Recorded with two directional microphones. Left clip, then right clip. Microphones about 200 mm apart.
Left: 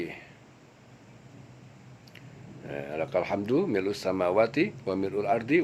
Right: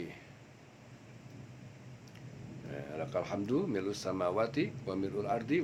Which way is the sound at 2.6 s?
35° left (ahead or behind).